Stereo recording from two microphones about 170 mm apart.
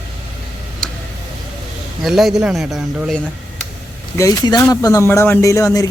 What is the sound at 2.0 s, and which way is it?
A man's voice, centre (ahead or behind).